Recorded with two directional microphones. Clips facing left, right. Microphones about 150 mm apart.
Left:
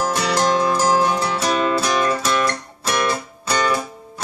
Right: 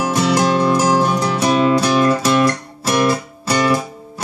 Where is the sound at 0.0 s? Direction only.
5° right (ahead or behind).